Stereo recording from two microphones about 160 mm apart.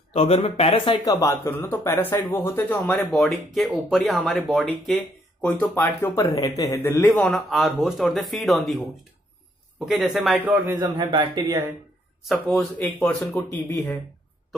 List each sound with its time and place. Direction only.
0.1 s speech: 40° left (ahead or behind); by 2.8 s 15° left (ahead or behind)
2.8 s speech: centre (ahead or behind)
4.9 s speech: 10° left (ahead or behind)
7.2 s speech: centre (ahead or behind)
10.7 s speech: 30° right (ahead or behind)
12.2 s speech: centre (ahead or behind)